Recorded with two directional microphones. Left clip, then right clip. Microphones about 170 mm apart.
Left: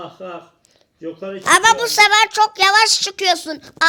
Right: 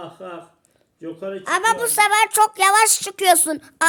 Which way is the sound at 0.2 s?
40° left (ahead or behind).